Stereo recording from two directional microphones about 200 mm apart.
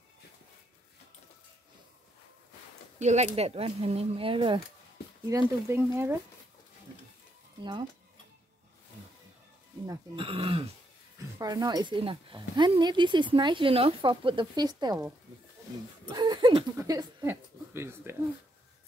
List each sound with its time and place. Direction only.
3.0 s speech: 35° right (ahead or behind); by 6.1 s 10° right (ahead or behind)
9.8 s speech: 25° right (ahead or behind)
16.1 s speech: 20° right (ahead or behind)